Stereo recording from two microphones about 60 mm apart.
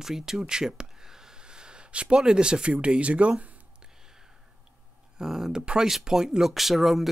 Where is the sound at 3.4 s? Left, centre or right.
Right.